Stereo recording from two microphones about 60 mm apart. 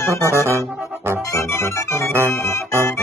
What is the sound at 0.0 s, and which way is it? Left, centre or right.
Music, left.